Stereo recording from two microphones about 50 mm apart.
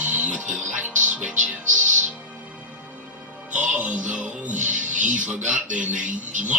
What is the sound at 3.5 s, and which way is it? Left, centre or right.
Music, right.